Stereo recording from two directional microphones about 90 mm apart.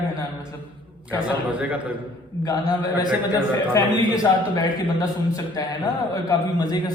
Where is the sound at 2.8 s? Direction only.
50° left (ahead or behind).